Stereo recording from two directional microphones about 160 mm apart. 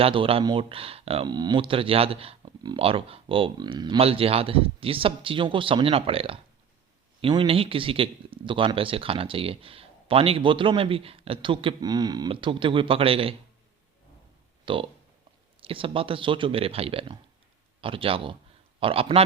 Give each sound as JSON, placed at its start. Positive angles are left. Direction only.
{"t": 0.0, "sound": "speech", "side_deg": -35}
{"t": 14.6, "sound": "a sound", "side_deg": -35}
{"t": 15.6, "sound": "speech", "side_deg": -35}